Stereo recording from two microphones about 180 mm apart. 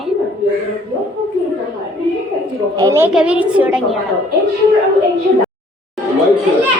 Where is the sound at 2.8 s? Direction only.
15° right (ahead or behind).